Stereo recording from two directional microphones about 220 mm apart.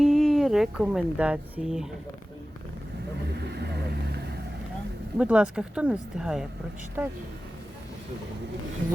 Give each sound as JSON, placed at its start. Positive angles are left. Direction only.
{"t": 0.0, "sound": "speech", "side_deg": 0}
{"t": 3.3, "sound": "vehicle", "side_deg": -50}
{"t": 5.1, "sound": "speech", "side_deg": -5}